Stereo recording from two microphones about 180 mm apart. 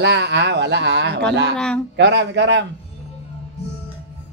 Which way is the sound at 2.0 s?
80° right.